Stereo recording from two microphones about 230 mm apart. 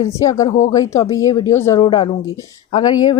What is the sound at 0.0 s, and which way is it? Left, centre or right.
A woman's voice, centre.